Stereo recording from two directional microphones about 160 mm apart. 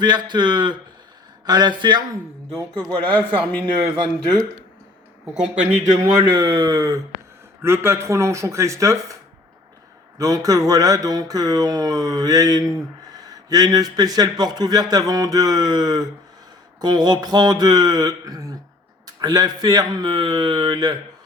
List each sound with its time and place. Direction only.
0.0 s speech: 25° right (ahead or behind)
3.1 s a man's voice: 10° left (ahead or behind)
6.0 s speech: 25° right (ahead or behind)
10.2 s speech: 20° right (ahead or behind)